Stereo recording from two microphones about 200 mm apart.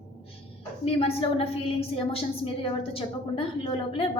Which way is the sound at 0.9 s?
30° left (ahead or behind).